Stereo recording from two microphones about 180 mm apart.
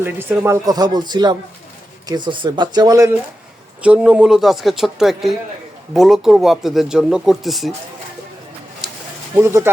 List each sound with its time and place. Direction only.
0.0 s speech: 10° right (ahead or behind)
3.8 s speech: 5° right (ahead or behind)
8.8 s a sound: 5° right (ahead or behind)
9.3 s speech: 15° right (ahead or behind)